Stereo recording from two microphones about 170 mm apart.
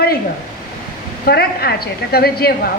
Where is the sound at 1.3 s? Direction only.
70° left (ahead or behind).